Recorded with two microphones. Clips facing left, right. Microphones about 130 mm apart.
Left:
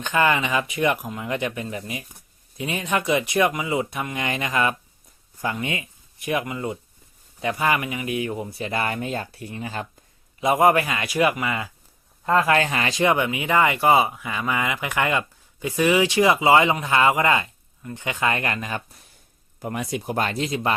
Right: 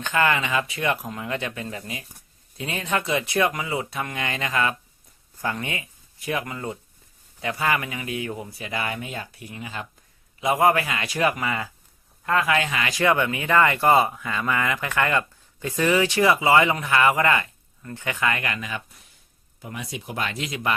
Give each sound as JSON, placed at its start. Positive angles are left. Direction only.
{"t": 0.0, "sound": "speech", "side_deg": 20}
{"t": 9.1, "sound": "speech", "side_deg": 30}
{"t": 10.4, "sound": "speech", "side_deg": 20}
{"t": 12.2, "sound": "speech", "side_deg": 30}
{"t": 12.9, "sound": "speech", "side_deg": 20}
{"t": 19.6, "sound": "speech", "side_deg": 50}